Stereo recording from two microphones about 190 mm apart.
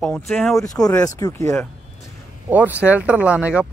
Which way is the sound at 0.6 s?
20° left (ahead or behind).